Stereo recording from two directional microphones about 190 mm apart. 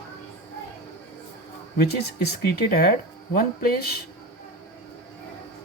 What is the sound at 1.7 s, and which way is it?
Speech, 55° left (ahead or behind).